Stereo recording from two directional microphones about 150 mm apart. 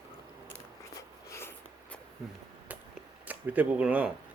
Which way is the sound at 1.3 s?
15° left (ahead or behind).